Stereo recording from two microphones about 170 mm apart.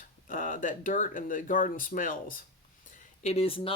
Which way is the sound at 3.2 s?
40° left (ahead or behind).